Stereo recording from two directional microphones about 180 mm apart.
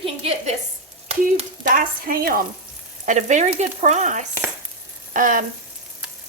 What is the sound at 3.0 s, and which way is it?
Stir, 45° right (ahead or behind).